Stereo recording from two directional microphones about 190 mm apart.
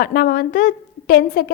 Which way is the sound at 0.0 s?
50° left (ahead or behind).